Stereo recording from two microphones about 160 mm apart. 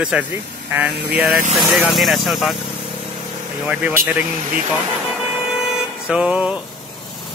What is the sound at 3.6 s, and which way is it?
Speech, 10° right (ahead or behind).